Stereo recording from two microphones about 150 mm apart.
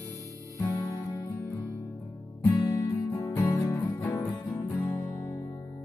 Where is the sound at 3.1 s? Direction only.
25° left (ahead or behind).